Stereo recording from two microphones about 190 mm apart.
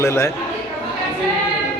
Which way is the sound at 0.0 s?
15° left (ahead or behind).